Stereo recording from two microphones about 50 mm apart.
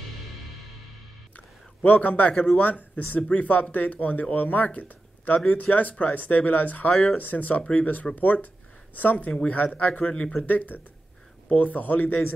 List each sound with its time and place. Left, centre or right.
1.9 s speech: left